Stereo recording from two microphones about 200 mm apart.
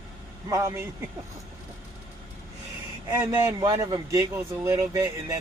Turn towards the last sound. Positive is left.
turn(degrees=-15)  # may be behind; listen again after turning